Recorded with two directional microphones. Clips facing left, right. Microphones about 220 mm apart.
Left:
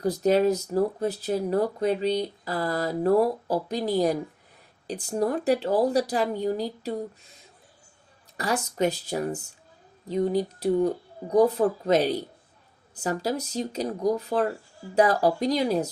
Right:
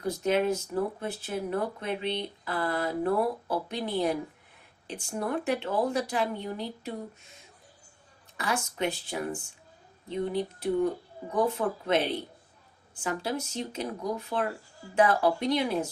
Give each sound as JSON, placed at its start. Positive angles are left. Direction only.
{"t": 0.0, "sound": "speech", "side_deg": 35}
{"t": 8.4, "sound": "speech", "side_deg": 40}